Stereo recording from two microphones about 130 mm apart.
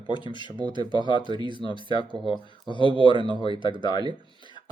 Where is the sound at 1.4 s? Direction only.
40° left (ahead or behind).